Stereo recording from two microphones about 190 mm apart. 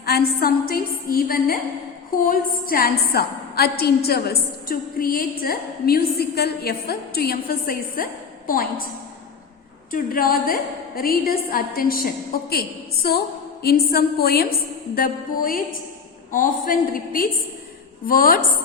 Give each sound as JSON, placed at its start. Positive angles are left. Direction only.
{"t": 0.0, "sound": "a woman's voice", "side_deg": 55}
{"t": 9.9, "sound": "a woman's voice", "side_deg": 50}